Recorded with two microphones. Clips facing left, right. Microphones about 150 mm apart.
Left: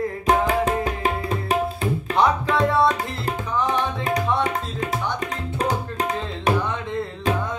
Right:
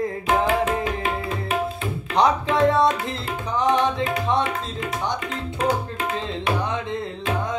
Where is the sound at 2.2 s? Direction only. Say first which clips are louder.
Right 2 dB; 20° right (ahead or behind).